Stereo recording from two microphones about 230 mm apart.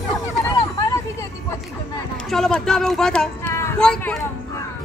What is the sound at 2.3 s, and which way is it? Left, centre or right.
Speech, centre.